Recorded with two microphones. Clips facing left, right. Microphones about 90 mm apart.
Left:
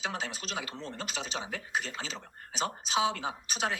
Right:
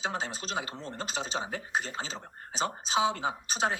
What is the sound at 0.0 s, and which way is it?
Speech, 30° right (ahead or behind).